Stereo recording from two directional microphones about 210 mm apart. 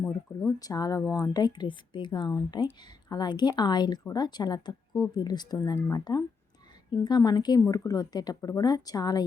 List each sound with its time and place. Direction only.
0.4 s a woman's voice: 15° left (ahead or behind)